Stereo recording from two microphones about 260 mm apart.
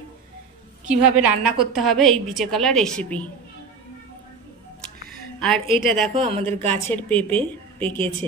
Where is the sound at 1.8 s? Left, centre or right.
Centre.